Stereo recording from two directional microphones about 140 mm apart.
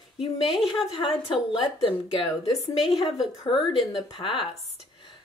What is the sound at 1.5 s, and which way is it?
Speech, 35° left (ahead or behind).